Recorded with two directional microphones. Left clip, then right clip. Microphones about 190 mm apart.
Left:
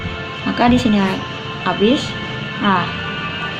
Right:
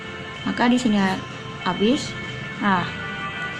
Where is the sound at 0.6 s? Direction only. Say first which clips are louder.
Left 5 dB; 35° right (ahead or behind).